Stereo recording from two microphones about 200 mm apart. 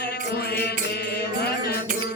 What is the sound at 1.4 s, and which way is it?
Mantra, 50° left (ahead or behind).